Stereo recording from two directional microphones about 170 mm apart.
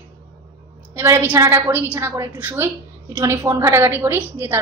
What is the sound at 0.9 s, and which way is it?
A woman's voice, 15° right (ahead or behind).